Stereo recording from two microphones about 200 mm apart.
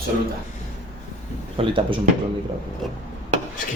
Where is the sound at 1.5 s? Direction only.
25° right (ahead or behind).